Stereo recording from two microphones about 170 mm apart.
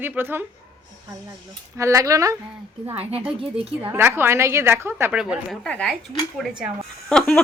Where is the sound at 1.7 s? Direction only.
20° right (ahead or behind).